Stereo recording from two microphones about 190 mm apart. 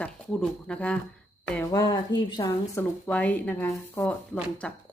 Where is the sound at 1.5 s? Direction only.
20° left (ahead or behind).